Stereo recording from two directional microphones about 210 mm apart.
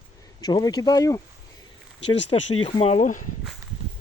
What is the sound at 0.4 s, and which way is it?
Speech, 20° left (ahead or behind).